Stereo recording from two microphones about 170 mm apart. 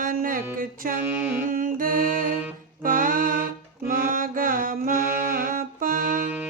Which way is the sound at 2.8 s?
55° right (ahead or behind).